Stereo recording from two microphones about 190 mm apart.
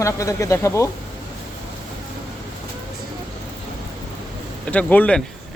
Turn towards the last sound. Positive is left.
turn(degrees=5)  # may be behind; listen again after turning